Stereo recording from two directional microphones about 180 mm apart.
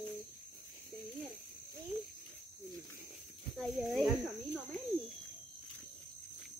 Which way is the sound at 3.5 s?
Centre (ahead or behind).